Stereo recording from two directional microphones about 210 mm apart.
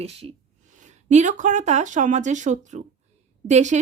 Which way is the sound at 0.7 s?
35° right (ahead or behind).